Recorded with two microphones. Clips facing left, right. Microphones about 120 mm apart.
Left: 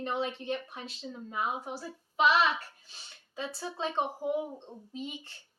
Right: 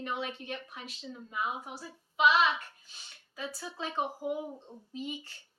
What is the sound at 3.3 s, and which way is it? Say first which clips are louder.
A woman's voice: left 3 dB; 25° left (ahead or behind).